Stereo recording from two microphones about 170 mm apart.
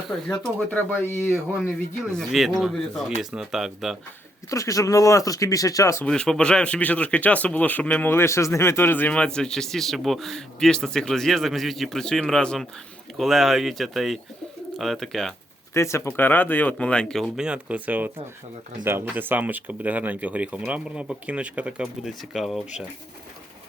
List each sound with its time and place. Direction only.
0.3 s speech: 10° left (ahead or behind)
2.1 s speech: centre (ahead or behind)
4.4 s speech: 20° left (ahead or behind)
6.1 s speech: 5° left (ahead or behind)
15.7 s speech: 15° left (ahead or behind); by 22.9 s 5° right (ahead or behind)